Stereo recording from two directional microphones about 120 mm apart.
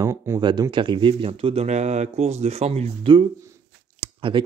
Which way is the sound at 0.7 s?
45° right (ahead or behind).